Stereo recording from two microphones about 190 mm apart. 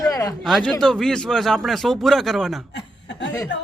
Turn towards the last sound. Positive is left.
turn(degrees=65)  # may be behind; listen again after turning